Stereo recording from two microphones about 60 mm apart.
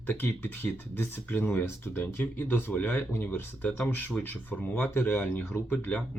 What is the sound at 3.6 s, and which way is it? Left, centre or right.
Speech, left.